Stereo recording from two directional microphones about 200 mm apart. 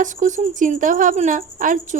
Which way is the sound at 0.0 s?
40° right (ahead or behind).